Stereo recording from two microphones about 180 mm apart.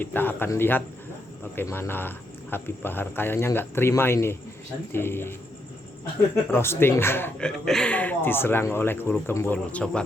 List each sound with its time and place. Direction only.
0.0 s speech: 10° left (ahead or behind)
6.5 s speech: 15° left (ahead or behind)